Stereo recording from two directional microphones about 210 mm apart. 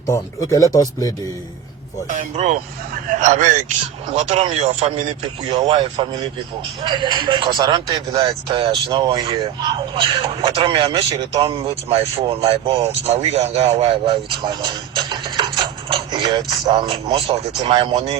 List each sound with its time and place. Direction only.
0.1 s speech: 15° left (ahead or behind)
2.0 s speech: 35° right (ahead or behind)
5.5 s speech: 20° right (ahead or behind)